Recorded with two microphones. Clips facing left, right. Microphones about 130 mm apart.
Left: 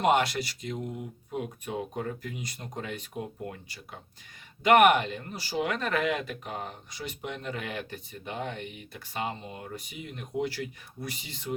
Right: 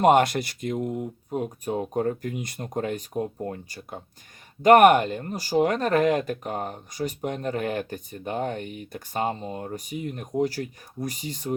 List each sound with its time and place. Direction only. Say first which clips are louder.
0.0 s speech: right 6 dB; 50° right (ahead or behind)